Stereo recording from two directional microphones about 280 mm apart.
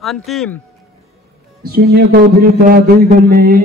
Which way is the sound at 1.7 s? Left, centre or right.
Right.